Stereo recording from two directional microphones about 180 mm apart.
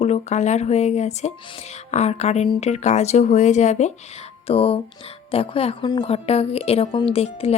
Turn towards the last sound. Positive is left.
turn(degrees=35)  # may be behind; listen again after turning